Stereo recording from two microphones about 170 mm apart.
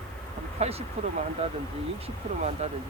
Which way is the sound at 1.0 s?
35° right (ahead or behind).